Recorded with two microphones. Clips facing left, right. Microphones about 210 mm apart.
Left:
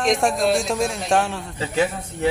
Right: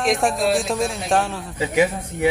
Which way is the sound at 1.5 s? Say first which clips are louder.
Right 3 dB; 15° right (ahead or behind).